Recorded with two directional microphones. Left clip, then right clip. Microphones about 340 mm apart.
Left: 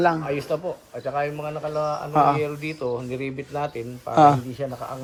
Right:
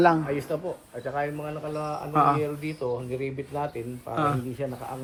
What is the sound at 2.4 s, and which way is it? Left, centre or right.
A man's voice, left.